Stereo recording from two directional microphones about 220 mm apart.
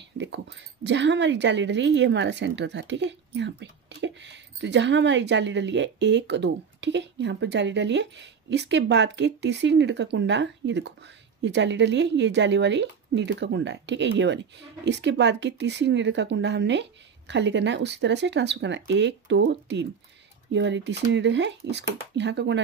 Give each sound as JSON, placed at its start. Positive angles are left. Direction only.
{"t": 0.2, "sound": "speech", "side_deg": -55}